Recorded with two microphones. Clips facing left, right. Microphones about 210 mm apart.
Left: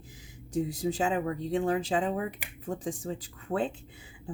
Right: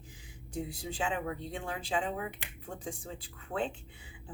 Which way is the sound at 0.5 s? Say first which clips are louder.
Left 9 dB; 40° left (ahead or behind).